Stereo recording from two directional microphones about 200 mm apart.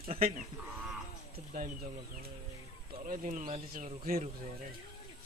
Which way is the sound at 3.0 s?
40° right (ahead or behind).